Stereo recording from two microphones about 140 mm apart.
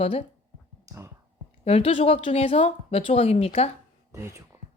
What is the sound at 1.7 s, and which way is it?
Speech, 45° left (ahead or behind).